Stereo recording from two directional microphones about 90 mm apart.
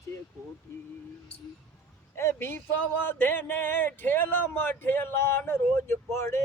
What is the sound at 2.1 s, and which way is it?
Speech, 25° left (ahead or behind).